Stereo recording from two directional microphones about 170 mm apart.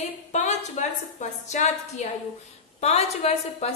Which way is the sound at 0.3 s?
45° left (ahead or behind).